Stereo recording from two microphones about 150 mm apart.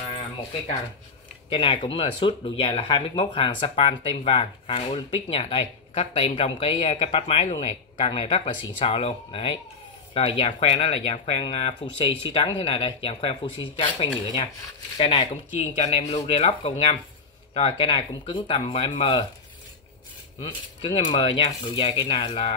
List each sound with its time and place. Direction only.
1.5 s speech: 35° left (ahead or behind)
20.3 s speech: 35° left (ahead or behind)